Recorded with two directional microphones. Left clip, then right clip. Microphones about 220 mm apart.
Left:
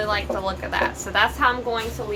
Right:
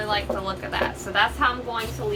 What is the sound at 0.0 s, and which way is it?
A woman's voice, 35° left (ahead or behind).